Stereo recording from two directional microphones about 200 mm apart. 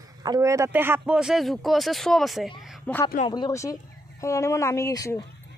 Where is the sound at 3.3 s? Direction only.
20° left (ahead or behind).